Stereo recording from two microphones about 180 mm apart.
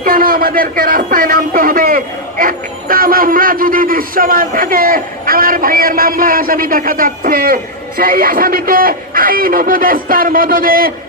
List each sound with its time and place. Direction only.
0.0 s a man's voice: 50° right (ahead or behind)